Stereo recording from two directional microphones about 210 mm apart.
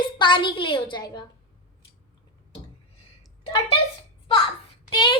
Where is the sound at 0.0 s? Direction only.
20° left (ahead or behind).